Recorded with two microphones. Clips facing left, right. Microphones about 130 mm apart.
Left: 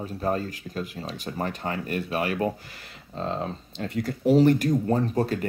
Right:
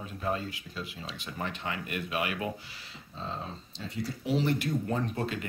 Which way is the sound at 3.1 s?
65° left (ahead or behind).